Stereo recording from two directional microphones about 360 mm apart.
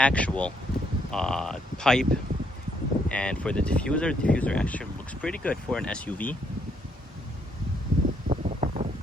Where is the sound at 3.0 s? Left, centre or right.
Centre.